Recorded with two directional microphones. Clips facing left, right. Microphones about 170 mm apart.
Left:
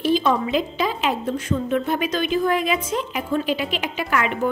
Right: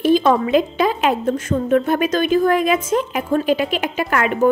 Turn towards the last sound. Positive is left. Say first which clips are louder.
# right 5 dB
turn(degrees=-45)  # may be behind; listen again after turning